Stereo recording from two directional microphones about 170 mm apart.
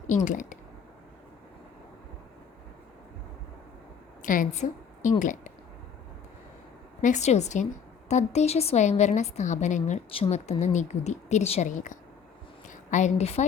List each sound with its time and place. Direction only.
0.3 s a woman's voice: 50° left (ahead or behind)
4.2 s a woman's voice: 50° left (ahead or behind)
7.0 s a woman's voice: 45° left (ahead or behind)
12.6 s a sound: 45° left (ahead or behind)